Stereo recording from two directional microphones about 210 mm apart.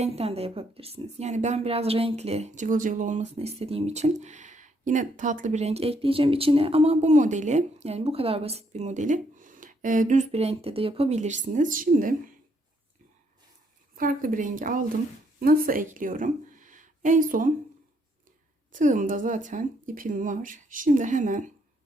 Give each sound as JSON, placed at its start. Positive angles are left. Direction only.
{"t": 0.0, "sound": "a woman's voice", "side_deg": -30}
{"t": 13.9, "sound": "a woman's voice", "side_deg": -40}
{"t": 18.7, "sound": "a woman's voice", "side_deg": -40}